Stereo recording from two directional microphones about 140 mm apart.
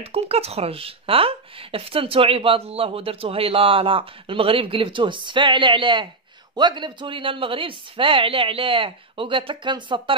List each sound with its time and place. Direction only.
0.0 s speech: 45° right (ahead or behind)